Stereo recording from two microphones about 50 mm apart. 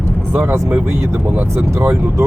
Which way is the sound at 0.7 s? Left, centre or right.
Right.